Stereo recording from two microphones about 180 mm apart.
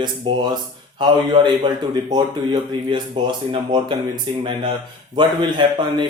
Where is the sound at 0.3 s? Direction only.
30° right (ahead or behind).